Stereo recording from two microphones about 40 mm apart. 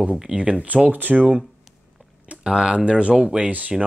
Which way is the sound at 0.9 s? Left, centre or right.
Right.